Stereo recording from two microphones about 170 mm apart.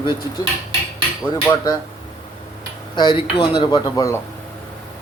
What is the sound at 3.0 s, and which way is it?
Speech, 25° left (ahead or behind).